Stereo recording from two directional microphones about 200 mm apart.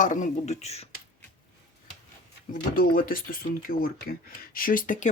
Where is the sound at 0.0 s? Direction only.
40° left (ahead or behind).